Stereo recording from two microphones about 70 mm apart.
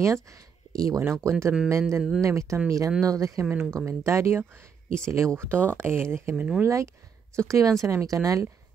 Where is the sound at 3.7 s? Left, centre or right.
Right.